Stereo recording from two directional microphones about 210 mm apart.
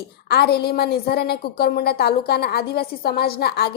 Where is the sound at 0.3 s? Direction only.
50° left (ahead or behind).